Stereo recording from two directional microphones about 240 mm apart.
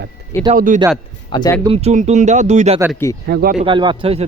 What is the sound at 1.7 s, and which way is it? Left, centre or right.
Speech, right.